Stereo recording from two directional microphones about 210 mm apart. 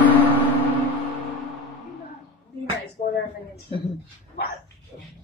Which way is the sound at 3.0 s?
35° left (ahead or behind).